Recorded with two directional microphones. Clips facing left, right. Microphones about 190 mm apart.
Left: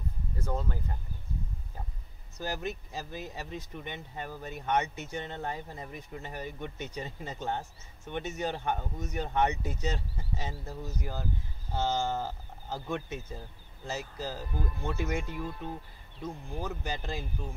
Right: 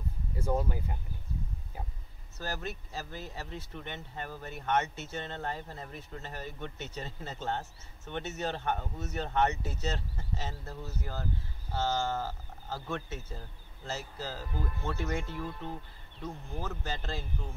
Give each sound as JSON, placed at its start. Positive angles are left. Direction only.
{"t": 0.4, "sound": "speech", "side_deg": -10}
{"t": 2.3, "sound": "speech", "side_deg": 15}